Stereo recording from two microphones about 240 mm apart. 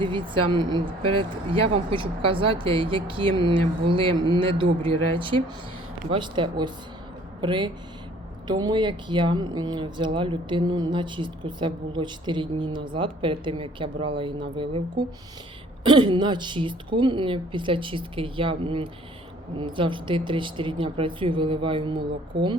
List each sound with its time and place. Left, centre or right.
0.0 s speech: centre